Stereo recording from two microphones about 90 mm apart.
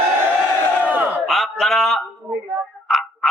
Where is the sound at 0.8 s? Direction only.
15° right (ahead or behind).